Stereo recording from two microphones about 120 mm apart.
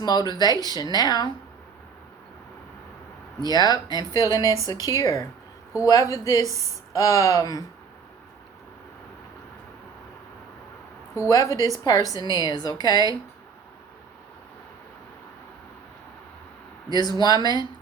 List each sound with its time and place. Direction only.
0.0 s a woman's voice: 35° left (ahead or behind)
3.4 s a woman's voice: 35° left (ahead or behind)
11.1 s a woman's voice: 30° left (ahead or behind)
16.9 s a woman's voice: 35° left (ahead or behind)